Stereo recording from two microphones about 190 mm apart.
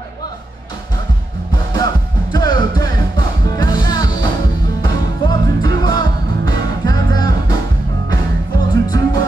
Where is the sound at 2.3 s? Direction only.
20° left (ahead or behind).